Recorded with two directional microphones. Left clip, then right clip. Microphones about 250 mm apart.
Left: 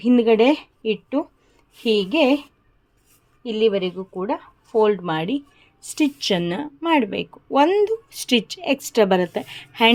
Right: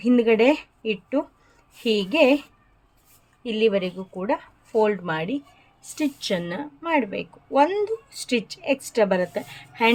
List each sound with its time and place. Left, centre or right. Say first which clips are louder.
0.0 s speech: left 2 dB; centre
1.8 s speech: left 1 dB; centre